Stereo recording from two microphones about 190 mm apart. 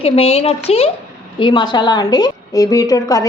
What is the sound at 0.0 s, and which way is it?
A woman's voice, 30° left (ahead or behind).